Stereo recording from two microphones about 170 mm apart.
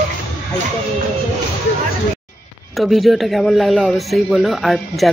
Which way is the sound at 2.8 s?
Centre (ahead or behind).